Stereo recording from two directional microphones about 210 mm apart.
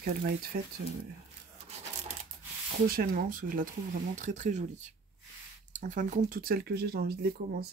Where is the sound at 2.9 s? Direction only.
45° right (ahead or behind).